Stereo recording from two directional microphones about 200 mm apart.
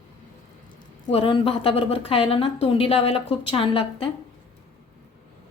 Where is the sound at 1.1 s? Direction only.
30° left (ahead or behind).